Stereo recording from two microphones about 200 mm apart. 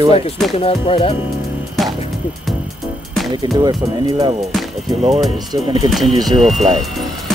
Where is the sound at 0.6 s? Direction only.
30° left (ahead or behind).